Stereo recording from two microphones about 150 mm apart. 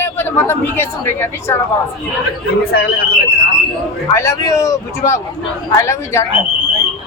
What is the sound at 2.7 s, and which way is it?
Speech, 90° left.